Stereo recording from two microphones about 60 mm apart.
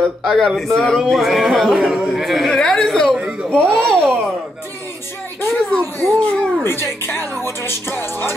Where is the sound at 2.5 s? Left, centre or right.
Centre.